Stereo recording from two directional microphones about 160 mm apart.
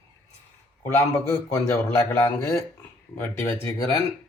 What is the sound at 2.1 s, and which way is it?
Speech, 15° left (ahead or behind).